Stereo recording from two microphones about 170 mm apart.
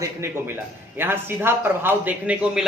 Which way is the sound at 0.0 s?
15° right (ahead or behind).